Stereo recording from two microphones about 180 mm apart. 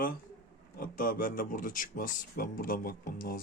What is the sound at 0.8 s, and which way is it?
Speech, 50° left (ahead or behind).